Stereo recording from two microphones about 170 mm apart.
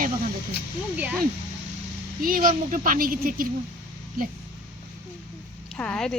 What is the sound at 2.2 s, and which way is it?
Speech, 55° right (ahead or behind).